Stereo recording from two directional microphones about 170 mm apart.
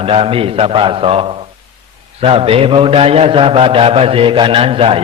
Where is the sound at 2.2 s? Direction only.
35° right (ahead or behind).